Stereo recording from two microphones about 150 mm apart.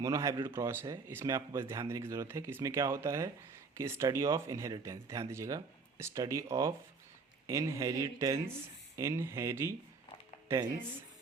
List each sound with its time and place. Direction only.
0.0 s speech: 20° right (ahead or behind)